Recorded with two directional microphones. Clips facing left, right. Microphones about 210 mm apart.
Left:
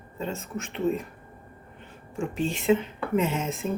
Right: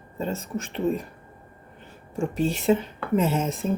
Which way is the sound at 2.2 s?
40° right (ahead or behind).